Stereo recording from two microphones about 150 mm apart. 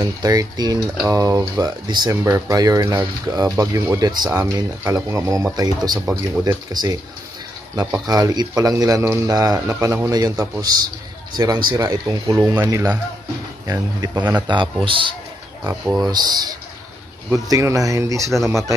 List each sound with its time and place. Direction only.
0.0 s speech: 25° right (ahead or behind)
8.1 s speech: 25° right (ahead or behind)
14.1 s speech: 10° right (ahead or behind)
14.5 s a man's voice: 35° right (ahead or behind)
15.6 s speech: 15° right (ahead or behind)
16.1 s speech: 25° right (ahead or behind)